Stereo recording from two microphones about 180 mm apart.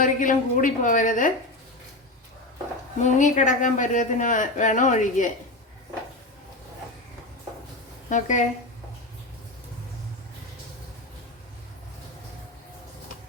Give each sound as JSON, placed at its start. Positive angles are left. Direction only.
{"t": 0.0, "sound": "speech", "side_deg": 45}
{"t": 3.0, "sound": "speech", "side_deg": 45}
{"t": 8.1, "sound": "speech", "side_deg": 45}